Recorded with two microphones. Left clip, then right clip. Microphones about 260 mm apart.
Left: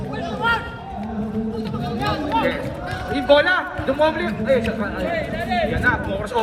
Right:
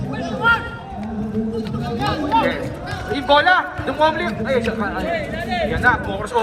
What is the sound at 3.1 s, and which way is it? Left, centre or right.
A man's voice, centre.